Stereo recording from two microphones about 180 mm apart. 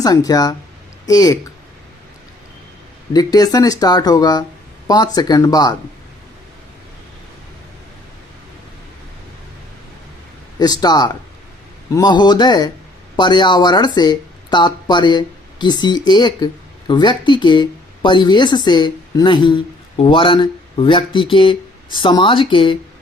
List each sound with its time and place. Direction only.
0.0 s speech: 20° left (ahead or behind)
3.1 s speech: 20° left (ahead or behind)
10.6 s speech: 20° left (ahead or behind)